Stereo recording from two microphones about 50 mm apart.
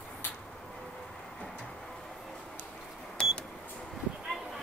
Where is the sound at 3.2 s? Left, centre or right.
Centre.